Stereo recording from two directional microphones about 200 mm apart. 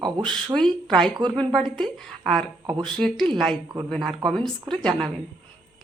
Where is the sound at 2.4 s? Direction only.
20° right (ahead or behind).